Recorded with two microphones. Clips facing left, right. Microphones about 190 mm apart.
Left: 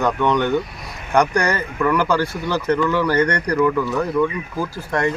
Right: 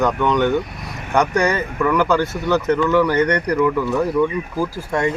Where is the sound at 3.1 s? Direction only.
20° right (ahead or behind).